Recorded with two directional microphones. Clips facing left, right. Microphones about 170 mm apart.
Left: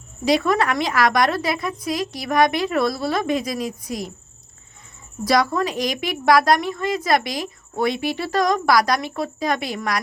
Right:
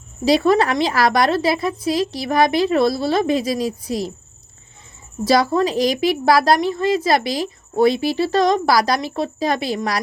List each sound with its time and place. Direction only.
0.3 s a woman's voice: 30° right (ahead or behind)
5.2 s a woman's voice: 30° right (ahead or behind)